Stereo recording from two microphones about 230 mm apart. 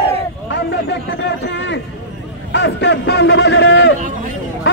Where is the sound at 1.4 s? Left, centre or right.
Left.